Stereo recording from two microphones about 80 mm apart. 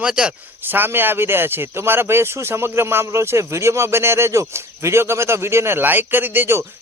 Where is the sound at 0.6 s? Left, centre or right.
Right.